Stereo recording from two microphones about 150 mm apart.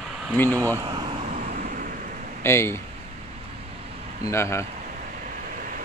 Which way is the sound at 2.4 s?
15° left (ahead or behind).